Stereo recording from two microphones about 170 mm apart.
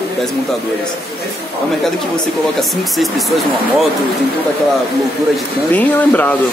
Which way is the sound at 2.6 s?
Centre (ahead or behind).